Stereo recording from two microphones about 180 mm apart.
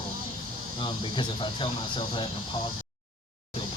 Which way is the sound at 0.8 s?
25° left (ahead or behind).